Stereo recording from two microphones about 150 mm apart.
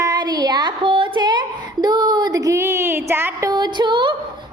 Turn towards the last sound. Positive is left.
turn(degrees=-30)  # may be behind; listen again after turning